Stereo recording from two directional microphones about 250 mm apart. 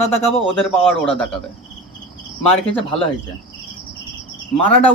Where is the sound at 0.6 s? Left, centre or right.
Centre.